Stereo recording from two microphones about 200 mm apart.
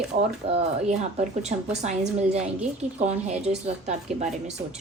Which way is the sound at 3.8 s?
35° right (ahead or behind).